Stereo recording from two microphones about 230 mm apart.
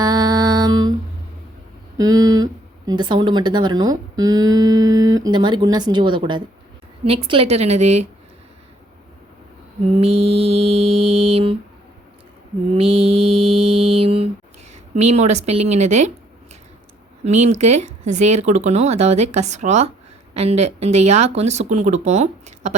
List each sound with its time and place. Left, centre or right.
0.0 s music: centre
2.0 s speech: centre
9.9 s speech: right
12.7 s mantra: right
14.9 s speech: right
17.2 s speech: right